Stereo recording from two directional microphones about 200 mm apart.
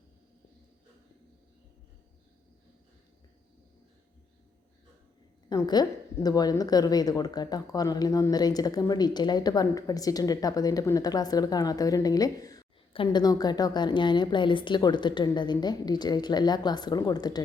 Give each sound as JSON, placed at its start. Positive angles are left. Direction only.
{"t": 5.5, "sound": "a woman's voice", "side_deg": 20}